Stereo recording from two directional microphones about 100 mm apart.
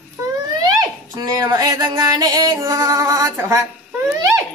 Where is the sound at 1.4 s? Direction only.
40° right (ahead or behind).